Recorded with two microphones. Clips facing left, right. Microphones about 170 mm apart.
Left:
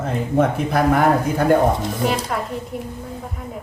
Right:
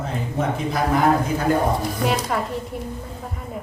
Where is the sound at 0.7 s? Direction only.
55° left (ahead or behind).